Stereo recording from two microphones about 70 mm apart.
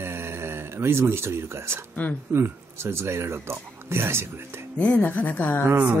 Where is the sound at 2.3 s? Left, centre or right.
Right.